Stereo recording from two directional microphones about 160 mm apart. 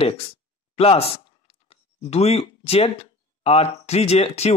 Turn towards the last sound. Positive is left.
turn(degrees=40)  # may be behind; listen again after turning